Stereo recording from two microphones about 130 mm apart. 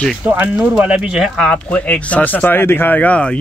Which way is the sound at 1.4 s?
10° left (ahead or behind).